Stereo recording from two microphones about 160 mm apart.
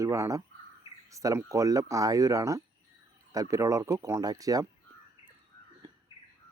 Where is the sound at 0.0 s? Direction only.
20° right (ahead or behind).